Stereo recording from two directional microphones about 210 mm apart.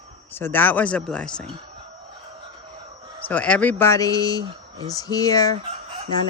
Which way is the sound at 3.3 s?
5° left (ahead or behind).